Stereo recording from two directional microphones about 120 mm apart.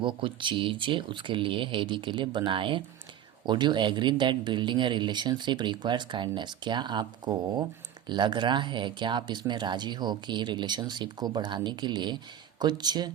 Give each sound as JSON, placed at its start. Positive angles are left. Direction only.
{"t": 0.0, "sound": "speech", "side_deg": -45}